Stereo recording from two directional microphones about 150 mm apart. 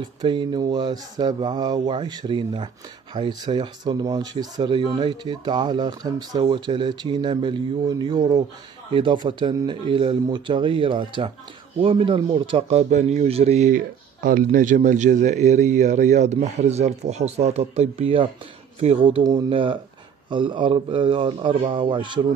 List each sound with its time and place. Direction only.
0.0 s speech: 30° right (ahead or behind)
13.7 s speech: 65° right (ahead or behind); by 22.2 s 35° right (ahead or behind)